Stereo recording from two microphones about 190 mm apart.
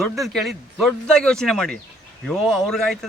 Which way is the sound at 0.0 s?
Centre (ahead or behind).